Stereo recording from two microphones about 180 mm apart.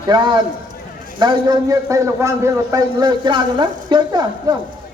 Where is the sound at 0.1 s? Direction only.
25° right (ahead or behind).